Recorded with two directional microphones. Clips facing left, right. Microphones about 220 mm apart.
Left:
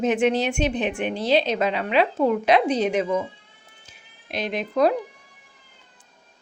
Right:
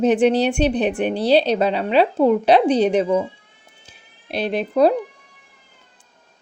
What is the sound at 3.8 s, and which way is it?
Music, 35° right (ahead or behind).